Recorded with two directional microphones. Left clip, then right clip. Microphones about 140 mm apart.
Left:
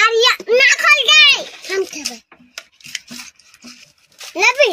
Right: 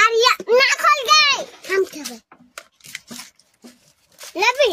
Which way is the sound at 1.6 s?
50° right (ahead or behind).